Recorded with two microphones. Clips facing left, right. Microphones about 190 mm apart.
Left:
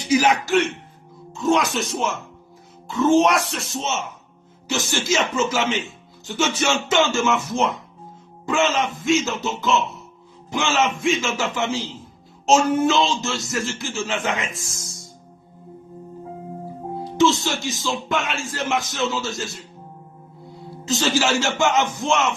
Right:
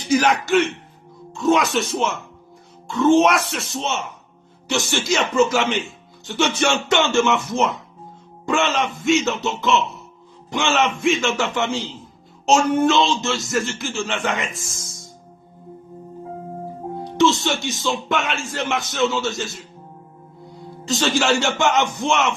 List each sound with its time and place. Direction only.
0.0 s speech: 10° left (ahead or behind)
17.0 s speech: centre (ahead or behind)
20.8 s speech: centre (ahead or behind)